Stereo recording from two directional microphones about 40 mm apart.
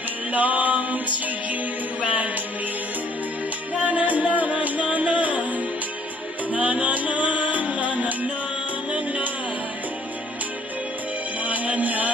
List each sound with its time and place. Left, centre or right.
0.3 s music: right
3.7 s music: right
11.4 s music: right